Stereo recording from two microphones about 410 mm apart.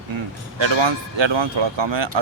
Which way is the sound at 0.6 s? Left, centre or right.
Right.